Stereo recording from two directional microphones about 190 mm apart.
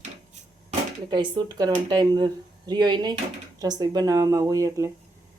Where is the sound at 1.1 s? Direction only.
20° right (ahead or behind).